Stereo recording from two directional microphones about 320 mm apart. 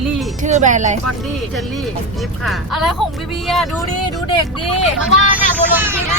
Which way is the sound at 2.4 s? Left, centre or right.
Centre.